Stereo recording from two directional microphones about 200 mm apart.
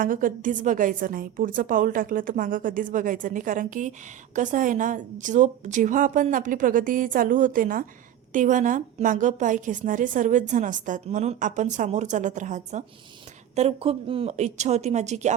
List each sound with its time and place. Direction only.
0.0 s a woman's voice: 45° right (ahead or behind)